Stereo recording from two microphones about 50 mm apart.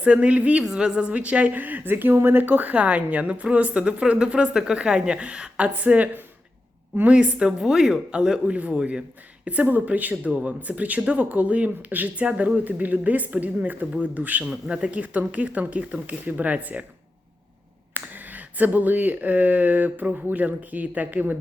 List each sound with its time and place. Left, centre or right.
0.0 s a woman's voice: right
0.6 s a man's voice: centre
1.0 s a woman's voice: right
1.5 s a woman's voice: right
7.6 s a man's voice: centre; by 16.8 s right
17.9 s speech: right